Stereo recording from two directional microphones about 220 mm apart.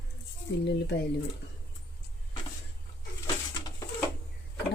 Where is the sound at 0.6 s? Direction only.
50° left (ahead or behind).